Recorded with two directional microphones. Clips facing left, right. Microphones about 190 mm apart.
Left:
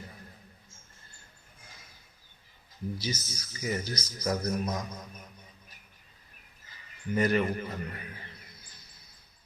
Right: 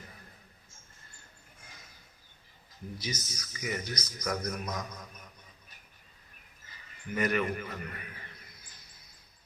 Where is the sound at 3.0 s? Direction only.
30° left (ahead or behind).